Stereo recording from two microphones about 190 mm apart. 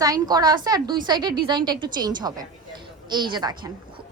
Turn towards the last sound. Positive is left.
turn(degrees=-20)  # may be behind; listen again after turning